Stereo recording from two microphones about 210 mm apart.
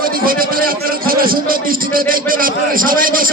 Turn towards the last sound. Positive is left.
turn(degrees=-40)  # may be behind; listen again after turning